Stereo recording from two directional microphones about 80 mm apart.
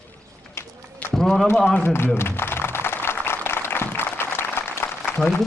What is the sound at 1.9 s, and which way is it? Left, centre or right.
Applause, left.